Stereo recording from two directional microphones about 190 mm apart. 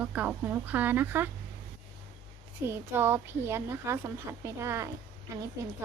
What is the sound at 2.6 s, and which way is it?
A woman's voice, 10° right (ahead or behind).